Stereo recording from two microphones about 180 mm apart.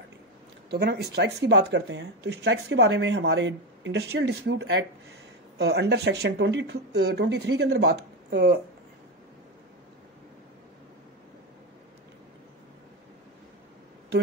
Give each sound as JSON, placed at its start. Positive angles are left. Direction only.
{"t": 0.7, "sound": "speech", "side_deg": -65}